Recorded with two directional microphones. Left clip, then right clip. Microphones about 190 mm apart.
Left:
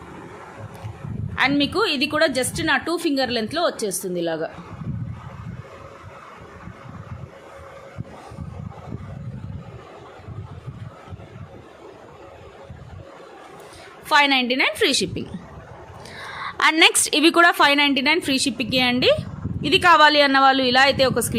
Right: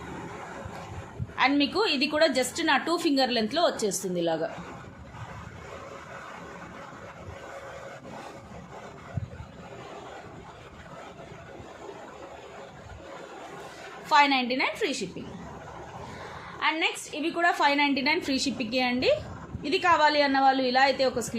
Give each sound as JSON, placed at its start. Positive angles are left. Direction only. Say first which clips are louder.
{"t": 1.4, "sound": "a woman's voice", "louder": "left 4 dB", "side_deg": 35}
{"t": 14.1, "sound": "a woman's voice", "louder": "left 5 dB", "side_deg": 45}
{"t": 16.6, "sound": "a woman's voice", "louder": "left 11 dB", "side_deg": 80}
{"t": 17.6, "sound": "a woman's voice", "louder": "left 7 dB", "side_deg": 45}